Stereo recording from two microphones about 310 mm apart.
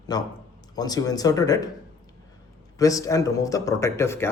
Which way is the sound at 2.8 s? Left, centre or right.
Centre.